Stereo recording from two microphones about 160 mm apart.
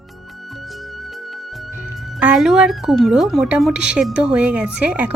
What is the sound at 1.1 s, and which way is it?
Music, centre (ahead or behind).